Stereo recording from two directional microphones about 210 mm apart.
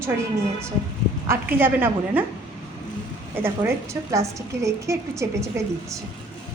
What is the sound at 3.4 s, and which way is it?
A woman's voice, 10° right (ahead or behind).